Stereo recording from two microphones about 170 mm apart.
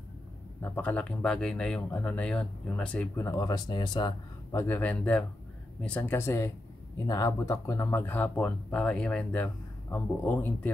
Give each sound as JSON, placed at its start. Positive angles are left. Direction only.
{"t": 0.6, "sound": "speech", "side_deg": 10}
{"t": 3.3, "sound": "speech", "side_deg": 20}